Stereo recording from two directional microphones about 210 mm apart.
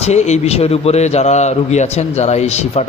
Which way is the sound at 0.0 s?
30° left (ahead or behind).